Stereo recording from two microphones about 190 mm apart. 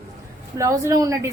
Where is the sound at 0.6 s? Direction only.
15° right (ahead or behind).